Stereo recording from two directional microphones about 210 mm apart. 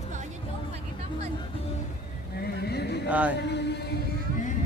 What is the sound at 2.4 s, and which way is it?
Vehicle, 50° left (ahead or behind).